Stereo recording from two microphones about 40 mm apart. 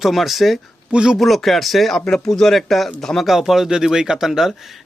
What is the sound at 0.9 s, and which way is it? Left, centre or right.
Speech, right.